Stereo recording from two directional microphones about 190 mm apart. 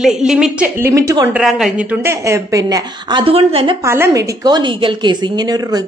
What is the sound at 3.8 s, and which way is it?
A woman's voice, 15° right (ahead or behind).